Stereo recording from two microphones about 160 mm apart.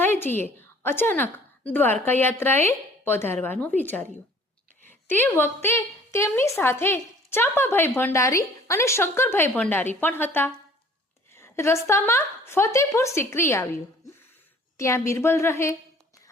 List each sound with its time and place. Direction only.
0.0 s a woman's voice: 15° left (ahead or behind)
14.8 s a woman's voice: 20° left (ahead or behind)